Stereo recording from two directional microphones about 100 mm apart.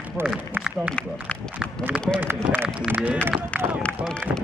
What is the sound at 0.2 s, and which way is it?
Speech, 5° right (ahead or behind).